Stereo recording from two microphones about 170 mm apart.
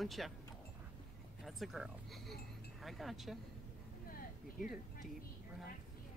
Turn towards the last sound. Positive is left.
turn(degrees=55)  # may be behind; listen again after turning